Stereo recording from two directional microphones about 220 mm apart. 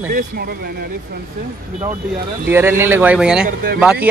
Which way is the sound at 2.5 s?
10° right (ahead or behind).